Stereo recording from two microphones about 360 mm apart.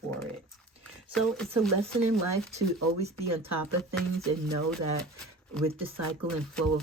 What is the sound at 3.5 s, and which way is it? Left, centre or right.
Speech, right.